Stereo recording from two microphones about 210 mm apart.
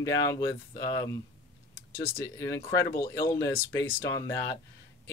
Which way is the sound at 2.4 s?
15° left (ahead or behind).